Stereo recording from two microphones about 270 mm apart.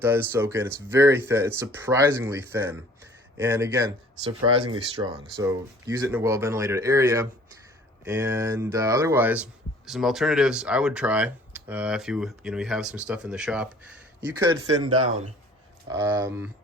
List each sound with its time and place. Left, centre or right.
0.0 s speech: centre
15.9 s speech: centre